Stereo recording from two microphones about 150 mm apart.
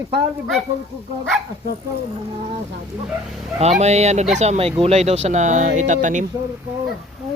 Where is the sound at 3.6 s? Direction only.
45° right (ahead or behind).